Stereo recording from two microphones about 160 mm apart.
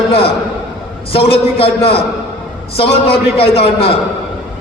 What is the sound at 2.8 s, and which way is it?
A man's voice, 35° left (ahead or behind).